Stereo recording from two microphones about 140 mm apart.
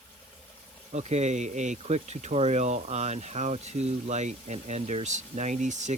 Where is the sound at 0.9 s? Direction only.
50° right (ahead or behind).